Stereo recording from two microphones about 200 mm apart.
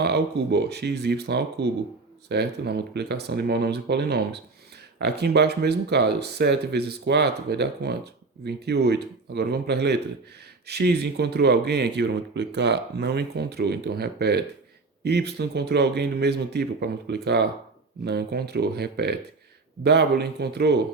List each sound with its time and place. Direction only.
0.0 s speech: 55° right (ahead or behind)